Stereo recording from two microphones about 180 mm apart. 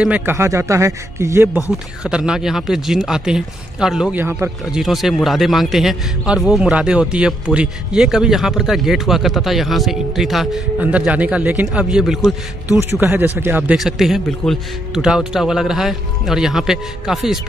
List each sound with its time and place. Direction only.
0.0 s a man's voice: 10° right (ahead or behind)
4.8 s a man's voice: centre (ahead or behind)